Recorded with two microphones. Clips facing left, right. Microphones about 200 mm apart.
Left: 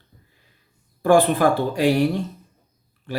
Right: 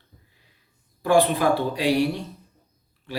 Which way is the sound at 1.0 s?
50° left (ahead or behind).